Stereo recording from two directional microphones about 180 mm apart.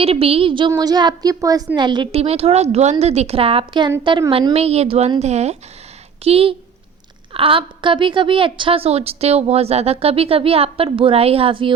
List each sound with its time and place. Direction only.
0.0 s a woman's voice: 35° right (ahead or behind)